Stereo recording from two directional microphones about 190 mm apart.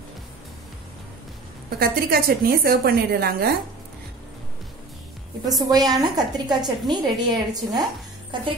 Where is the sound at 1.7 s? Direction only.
55° right (ahead or behind).